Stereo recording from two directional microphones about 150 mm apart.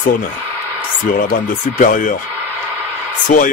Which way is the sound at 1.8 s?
65° left (ahead or behind).